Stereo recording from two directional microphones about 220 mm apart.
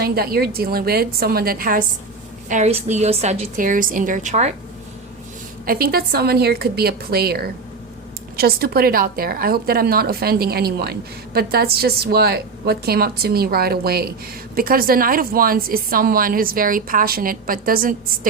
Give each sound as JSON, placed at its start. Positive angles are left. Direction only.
{"t": 0.0, "sound": "a woman's voice", "side_deg": -45}
{"t": 5.6, "sound": "a woman's voice", "side_deg": -45}